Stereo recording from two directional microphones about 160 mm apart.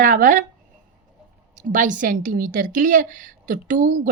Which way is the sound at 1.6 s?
50° right (ahead or behind).